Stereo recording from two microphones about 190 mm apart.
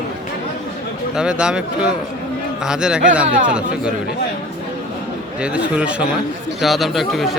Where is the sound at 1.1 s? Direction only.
5° right (ahead or behind).